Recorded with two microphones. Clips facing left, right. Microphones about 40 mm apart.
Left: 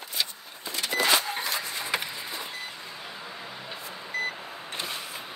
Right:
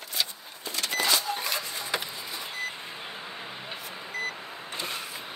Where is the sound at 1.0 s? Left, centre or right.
Left.